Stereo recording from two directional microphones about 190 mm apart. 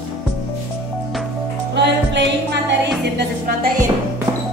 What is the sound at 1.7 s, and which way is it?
Music, 65° right (ahead or behind).